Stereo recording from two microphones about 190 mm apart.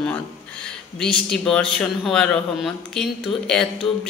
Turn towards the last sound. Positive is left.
turn(degrees=5)  # may be behind; listen again after turning